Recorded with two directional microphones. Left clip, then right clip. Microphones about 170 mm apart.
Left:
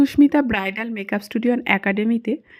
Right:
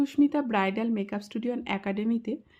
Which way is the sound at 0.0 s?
40° left (ahead or behind).